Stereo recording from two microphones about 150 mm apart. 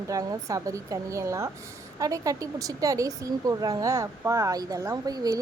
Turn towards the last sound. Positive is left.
turn(degrees=-25)  # may be behind; listen again after turning